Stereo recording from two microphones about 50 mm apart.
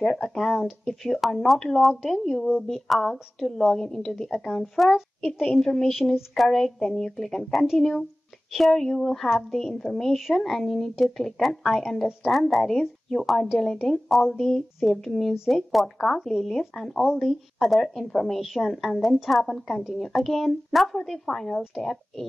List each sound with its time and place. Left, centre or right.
0.0 s a woman's voice: centre
4.9 s a child's voice: centre
5.5 s a woman's voice: centre